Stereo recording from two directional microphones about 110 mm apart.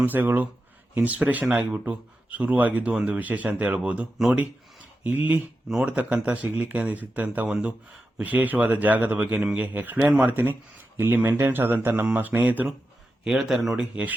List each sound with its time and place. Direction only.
0.0 s speech: 15° right (ahead or behind)